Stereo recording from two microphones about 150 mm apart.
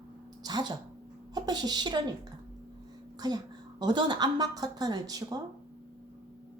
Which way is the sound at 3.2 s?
25° right (ahead or behind).